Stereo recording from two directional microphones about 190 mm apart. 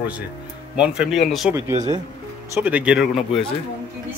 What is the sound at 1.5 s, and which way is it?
Speech, 15° right (ahead or behind).